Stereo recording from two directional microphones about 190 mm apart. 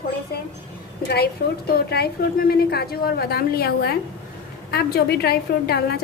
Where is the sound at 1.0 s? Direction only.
55° left (ahead or behind).